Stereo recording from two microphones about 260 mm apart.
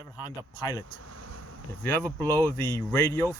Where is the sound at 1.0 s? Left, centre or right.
Right.